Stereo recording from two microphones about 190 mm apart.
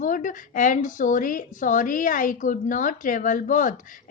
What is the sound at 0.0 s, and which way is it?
A woman's voice, 45° left (ahead or behind).